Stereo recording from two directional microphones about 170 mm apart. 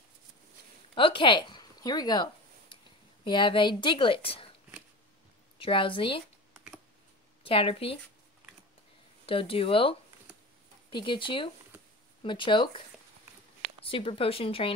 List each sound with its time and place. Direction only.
0.9 s speech: 30° left (ahead or behind)
3.3 s a woman's voice: 30° left (ahead or behind)
5.6 s speech: 30° left (ahead or behind)
7.4 s speech: 35° left (ahead or behind)
9.2 s a woman's voice: 35° left (ahead or behind)
13.8 s speech: 35° left (ahead or behind)